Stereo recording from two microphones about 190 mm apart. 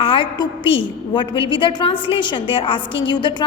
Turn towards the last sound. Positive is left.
turn(degrees=25)  # may be behind; listen again after turning